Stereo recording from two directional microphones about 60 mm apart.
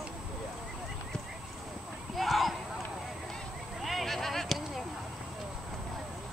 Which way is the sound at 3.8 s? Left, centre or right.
Centre.